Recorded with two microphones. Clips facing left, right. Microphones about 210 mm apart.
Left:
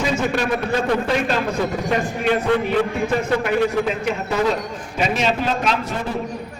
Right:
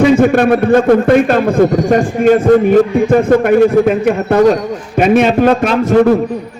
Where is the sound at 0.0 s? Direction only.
55° right (ahead or behind).